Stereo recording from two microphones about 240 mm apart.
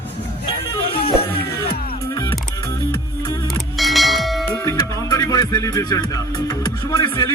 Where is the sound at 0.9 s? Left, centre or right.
Left.